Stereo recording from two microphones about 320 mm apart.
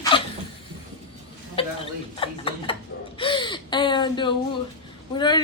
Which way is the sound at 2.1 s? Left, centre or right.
Centre.